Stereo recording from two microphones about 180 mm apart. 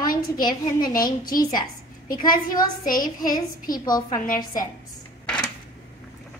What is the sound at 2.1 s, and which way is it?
A woman's voice, 50° left (ahead or behind).